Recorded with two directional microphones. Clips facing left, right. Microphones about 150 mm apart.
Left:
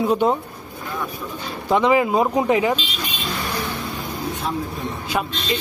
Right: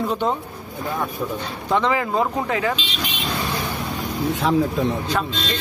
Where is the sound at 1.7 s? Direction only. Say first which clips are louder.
Left 4 dB; 15° left (ahead or behind).